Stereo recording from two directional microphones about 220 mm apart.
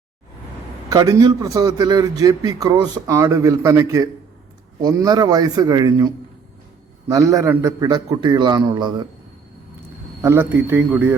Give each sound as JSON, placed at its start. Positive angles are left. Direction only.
{"t": 0.9, "sound": "a man's voice", "side_deg": -15}
{"t": 7.1, "sound": "a man's voice", "side_deg": -15}
{"t": 10.2, "sound": "a man's voice", "side_deg": -10}